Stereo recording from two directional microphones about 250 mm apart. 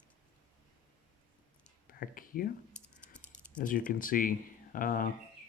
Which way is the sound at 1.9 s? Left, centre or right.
Left.